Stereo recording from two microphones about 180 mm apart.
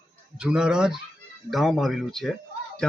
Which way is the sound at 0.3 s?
5° right (ahead or behind).